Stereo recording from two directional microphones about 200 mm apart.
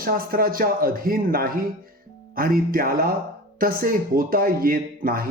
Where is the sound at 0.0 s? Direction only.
45° right (ahead or behind).